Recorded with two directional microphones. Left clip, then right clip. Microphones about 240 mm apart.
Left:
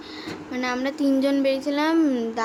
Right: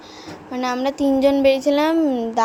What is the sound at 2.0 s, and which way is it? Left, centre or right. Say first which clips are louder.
Speech: right 3 dB; centre.